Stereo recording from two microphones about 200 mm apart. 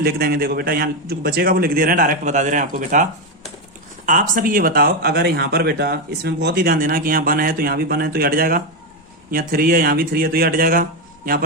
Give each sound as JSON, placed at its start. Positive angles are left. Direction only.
{"t": 0.0, "sound": "speech", "side_deg": -50}